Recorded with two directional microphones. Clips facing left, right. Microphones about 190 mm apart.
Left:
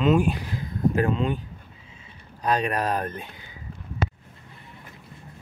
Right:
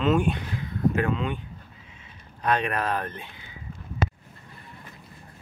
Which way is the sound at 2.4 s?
35° left (ahead or behind).